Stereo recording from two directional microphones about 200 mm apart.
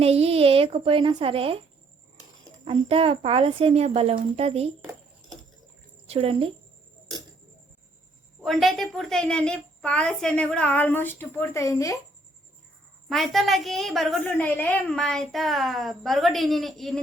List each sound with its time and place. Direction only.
0.0 s a woman's voice: 30° right (ahead or behind)
2.6 s a woman's voice: 30° right (ahead or behind)
6.1 s speech: 30° right (ahead or behind)
8.4 s a woman's voice: centre (ahead or behind)
13.1 s a woman's voice: centre (ahead or behind)